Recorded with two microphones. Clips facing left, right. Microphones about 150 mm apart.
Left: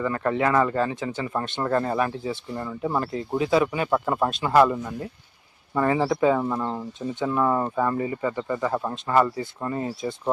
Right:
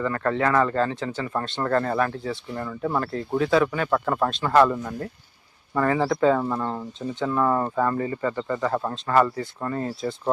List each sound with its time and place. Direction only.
0.0 s speech: 15° left (ahead or behind)
6.4 s speech: centre (ahead or behind)